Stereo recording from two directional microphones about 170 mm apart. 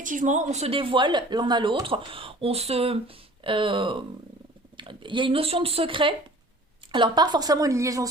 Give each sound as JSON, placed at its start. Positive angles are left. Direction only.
{"t": 0.0, "sound": "a woman's voice", "side_deg": -50}